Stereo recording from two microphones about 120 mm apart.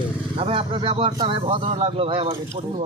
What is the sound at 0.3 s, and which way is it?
Speech, 50° right (ahead or behind).